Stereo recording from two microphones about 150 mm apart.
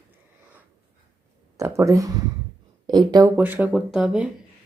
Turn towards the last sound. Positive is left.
turn(degrees=-5)  # may be behind; listen again after turning